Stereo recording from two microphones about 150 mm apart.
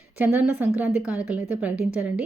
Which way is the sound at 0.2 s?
10° right (ahead or behind).